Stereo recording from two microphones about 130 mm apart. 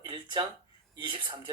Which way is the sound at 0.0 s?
35° right (ahead or behind).